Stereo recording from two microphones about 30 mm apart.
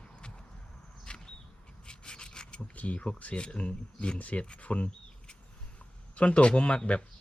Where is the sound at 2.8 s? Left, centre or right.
Left.